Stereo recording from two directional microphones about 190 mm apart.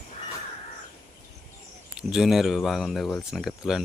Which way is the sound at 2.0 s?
Centre (ahead or behind).